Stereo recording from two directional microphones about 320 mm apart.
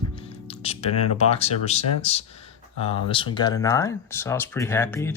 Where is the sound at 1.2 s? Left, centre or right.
Centre.